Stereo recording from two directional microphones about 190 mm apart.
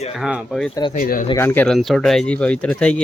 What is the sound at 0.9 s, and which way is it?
Speech, 45° left (ahead or behind).